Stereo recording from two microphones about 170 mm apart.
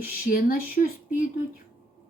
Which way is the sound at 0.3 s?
55° left (ahead or behind).